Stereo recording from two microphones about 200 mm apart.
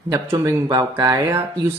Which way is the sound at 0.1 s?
15° right (ahead or behind).